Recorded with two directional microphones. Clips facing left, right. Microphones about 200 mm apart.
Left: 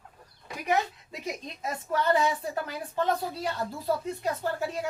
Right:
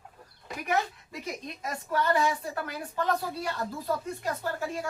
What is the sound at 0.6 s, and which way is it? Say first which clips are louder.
Speech: left 2 dB; 20° left (ahead or behind).